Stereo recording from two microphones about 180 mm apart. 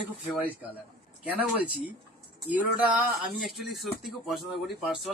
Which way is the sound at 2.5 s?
10° right (ahead or behind).